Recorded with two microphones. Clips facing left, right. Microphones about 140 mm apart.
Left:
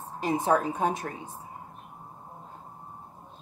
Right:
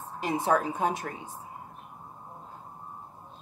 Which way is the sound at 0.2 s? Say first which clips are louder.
Left 1 dB; 40° left (ahead or behind).